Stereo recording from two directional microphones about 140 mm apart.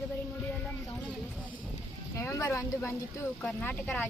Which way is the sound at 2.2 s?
20° left (ahead or behind).